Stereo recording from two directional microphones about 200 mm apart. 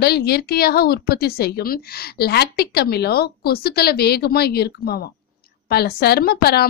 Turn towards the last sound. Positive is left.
turn(degrees=50)  # may be behind; listen again after turning